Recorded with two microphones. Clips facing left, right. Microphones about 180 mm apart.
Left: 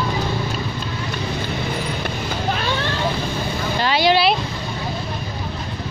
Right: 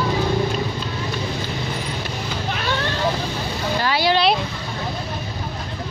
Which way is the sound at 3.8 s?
20° left (ahead or behind).